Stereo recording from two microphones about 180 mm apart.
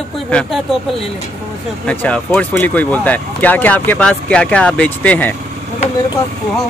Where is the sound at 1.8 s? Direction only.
5° left (ahead or behind).